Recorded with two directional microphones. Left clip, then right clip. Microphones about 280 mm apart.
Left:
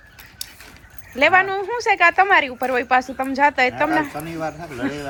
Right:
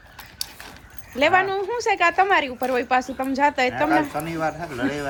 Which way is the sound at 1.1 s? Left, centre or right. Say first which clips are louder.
Left 3 dB; centre.